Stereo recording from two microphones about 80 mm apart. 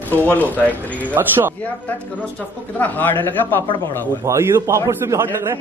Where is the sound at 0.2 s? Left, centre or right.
Left.